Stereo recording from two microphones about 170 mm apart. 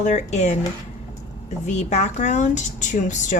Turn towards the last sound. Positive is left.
turn(degrees=45)  # may be behind; listen again after turning